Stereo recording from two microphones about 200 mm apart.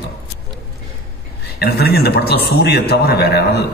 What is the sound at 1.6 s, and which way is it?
A man's voice, 50° left (ahead or behind).